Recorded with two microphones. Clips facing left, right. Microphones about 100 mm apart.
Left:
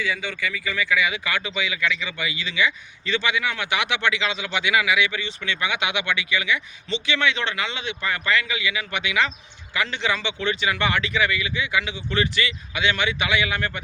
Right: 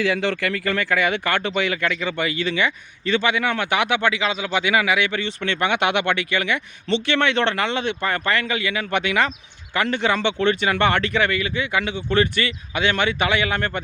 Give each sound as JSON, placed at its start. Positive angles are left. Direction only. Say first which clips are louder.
{"t": 0.0, "sound": "speech", "louder": "right 6 dB", "side_deg": -80}